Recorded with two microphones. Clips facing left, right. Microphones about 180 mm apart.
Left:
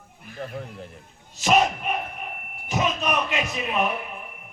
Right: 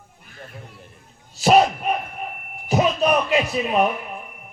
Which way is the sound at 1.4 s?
35° right (ahead or behind).